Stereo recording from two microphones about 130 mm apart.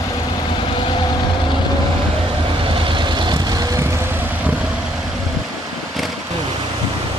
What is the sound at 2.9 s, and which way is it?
Vehicle, 35° right (ahead or behind).